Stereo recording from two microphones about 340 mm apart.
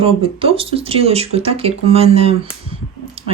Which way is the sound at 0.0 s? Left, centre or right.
Centre.